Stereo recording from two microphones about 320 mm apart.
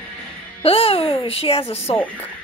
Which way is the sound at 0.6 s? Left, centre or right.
Centre.